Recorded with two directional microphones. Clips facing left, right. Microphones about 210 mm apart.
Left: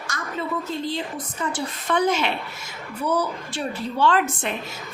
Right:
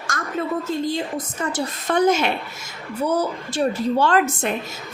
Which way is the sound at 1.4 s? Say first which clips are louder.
Right 1 dB; 45° right (ahead or behind).